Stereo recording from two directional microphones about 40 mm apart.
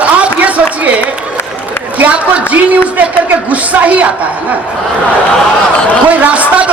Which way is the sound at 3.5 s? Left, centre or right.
Right.